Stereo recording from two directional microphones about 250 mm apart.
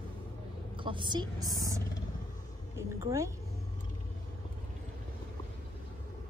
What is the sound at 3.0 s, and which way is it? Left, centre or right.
Speech, centre.